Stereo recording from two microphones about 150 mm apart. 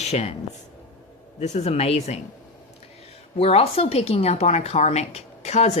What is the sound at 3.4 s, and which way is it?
A woman's voice, 40° left (ahead or behind).